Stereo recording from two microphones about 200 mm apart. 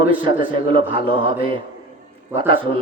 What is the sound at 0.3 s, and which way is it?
A man's voice, 25° right (ahead or behind).